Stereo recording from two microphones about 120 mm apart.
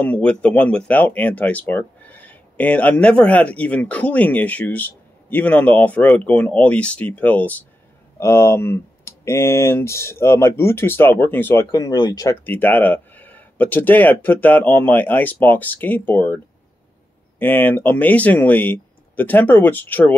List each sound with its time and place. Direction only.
0.0 s speech: 10° left (ahead or behind)
11.7 s speech: 35° left (ahead or behind)
12.4 s speech: 15° left (ahead or behind)
17.4 s speech: 15° left (ahead or behind)